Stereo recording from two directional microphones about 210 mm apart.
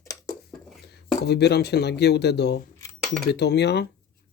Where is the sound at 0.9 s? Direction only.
50° left (ahead or behind).